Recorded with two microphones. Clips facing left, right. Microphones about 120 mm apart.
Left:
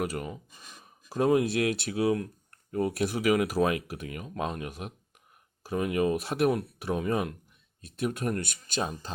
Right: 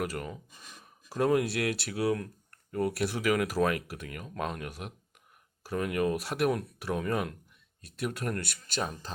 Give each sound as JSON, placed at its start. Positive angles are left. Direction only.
{"t": 0.0, "sound": "speech", "side_deg": 15}